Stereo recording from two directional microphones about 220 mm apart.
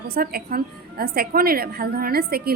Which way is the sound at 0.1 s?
45° right (ahead or behind).